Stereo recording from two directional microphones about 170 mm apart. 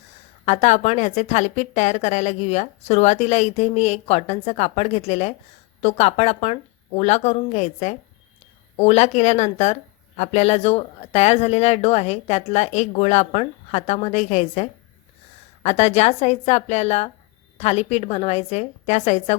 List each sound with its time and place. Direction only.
0.4 s a woman's voice: 40° left (ahead or behind)